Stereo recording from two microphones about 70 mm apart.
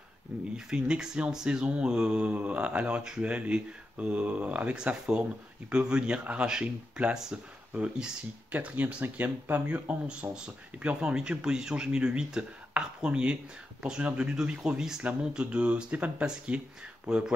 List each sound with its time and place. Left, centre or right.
0.7 s speech: centre